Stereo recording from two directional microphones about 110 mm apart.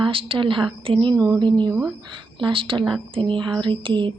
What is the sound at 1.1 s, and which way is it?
A woman's voice, 35° right (ahead or behind).